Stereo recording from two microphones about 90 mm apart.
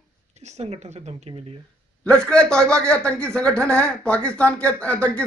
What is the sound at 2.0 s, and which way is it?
Speech, 10° left (ahead or behind).